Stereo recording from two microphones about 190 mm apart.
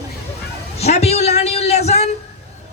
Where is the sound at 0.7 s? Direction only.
35° left (ahead or behind).